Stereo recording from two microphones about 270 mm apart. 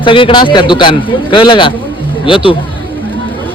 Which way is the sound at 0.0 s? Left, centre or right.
Centre.